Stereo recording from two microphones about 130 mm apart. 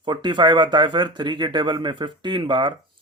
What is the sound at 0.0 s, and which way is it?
Speech, 35° right (ahead or behind).